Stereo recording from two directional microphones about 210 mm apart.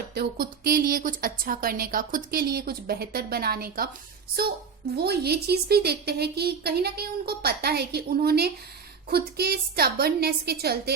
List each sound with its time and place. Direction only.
0.1 s a woman's voice: 45° right (ahead or behind)
4.9 s a woman's voice: 50° right (ahead or behind)